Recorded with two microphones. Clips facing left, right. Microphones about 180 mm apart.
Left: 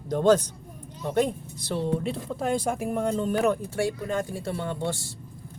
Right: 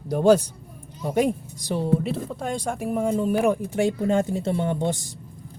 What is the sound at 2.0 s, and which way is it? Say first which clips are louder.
Speech: right 1 dB; centre (ahead or behind).